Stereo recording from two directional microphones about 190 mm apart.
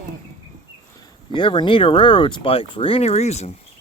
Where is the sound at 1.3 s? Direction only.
25° left (ahead or behind).